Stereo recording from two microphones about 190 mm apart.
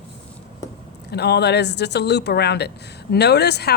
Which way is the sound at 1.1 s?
60° left (ahead or behind).